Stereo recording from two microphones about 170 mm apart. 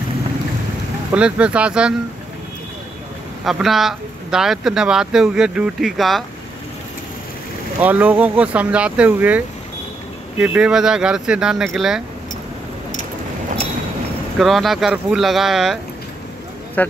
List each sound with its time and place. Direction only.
1.1 s speech: 5° right (ahead or behind)
3.4 s speech: centre (ahead or behind)
7.8 s speech: 10° right (ahead or behind)
10.4 s speech: 5° right (ahead or behind)
14.4 s speech: centre (ahead or behind)
16.8 s speech: 10° left (ahead or behind)